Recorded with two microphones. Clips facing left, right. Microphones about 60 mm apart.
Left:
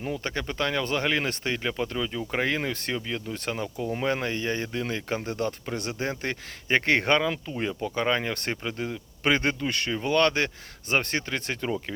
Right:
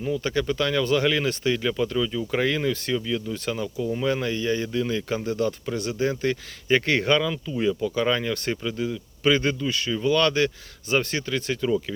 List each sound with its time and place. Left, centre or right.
0.0 s speech: left
1.6 s speech: left
9.9 s speech: left